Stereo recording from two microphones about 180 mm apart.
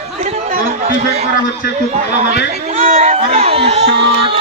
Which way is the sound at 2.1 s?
45° right (ahead or behind).